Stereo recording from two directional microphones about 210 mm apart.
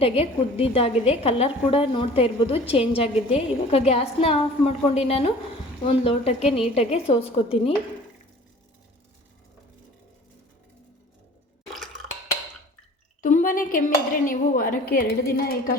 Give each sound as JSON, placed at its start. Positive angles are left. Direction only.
{"t": 0.0, "sound": "a woman's voice", "side_deg": 25}
{"t": 11.7, "sound": "a sound", "side_deg": 0}
{"t": 13.2, "sound": "speech", "side_deg": 40}